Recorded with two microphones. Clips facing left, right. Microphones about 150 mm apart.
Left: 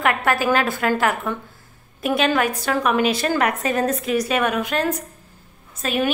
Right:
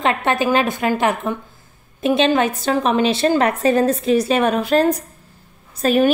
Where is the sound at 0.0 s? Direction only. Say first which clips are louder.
Right 2 dB; 25° right (ahead or behind).